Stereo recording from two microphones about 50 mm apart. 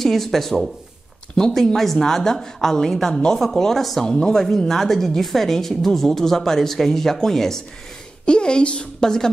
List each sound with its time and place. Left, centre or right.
0.0 s speech: centre
8.3 s speech: centre